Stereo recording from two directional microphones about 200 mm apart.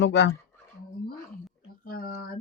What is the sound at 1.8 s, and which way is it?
Speech, 45° left (ahead or behind).